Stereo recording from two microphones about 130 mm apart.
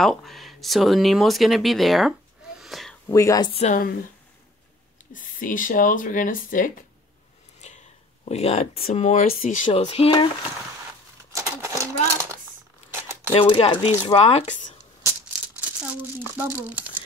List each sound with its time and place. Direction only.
0.0 s speech: centre (ahead or behind)
2.6 s a sound: centre (ahead or behind)
3.1 s speech: 25° left (ahead or behind)
5.1 s speech: 90° left
7.6 s a sound: 65° left (ahead or behind)
8.3 s speech: 55° left (ahead or behind)
8.8 s speech: 80° left
9.8 s speech: 55° left (ahead or behind)
11.3 s sewing machine: 25° right (ahead or behind)
13.3 s speech: 45° left (ahead or behind)
15.6 s speech: 10° right (ahead or behind)